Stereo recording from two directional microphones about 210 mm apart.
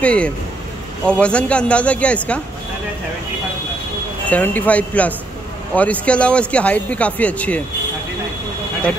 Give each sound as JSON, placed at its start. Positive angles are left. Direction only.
{"t": 0.0, "sound": "speech", "side_deg": 5}
{"t": 4.3, "sound": "speech", "side_deg": 10}